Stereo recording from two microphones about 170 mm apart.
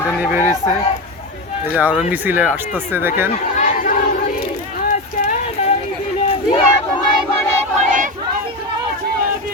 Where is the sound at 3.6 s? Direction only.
55° left (ahead or behind).